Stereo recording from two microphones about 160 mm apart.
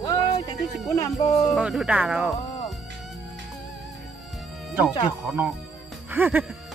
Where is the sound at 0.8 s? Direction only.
20° left (ahead or behind).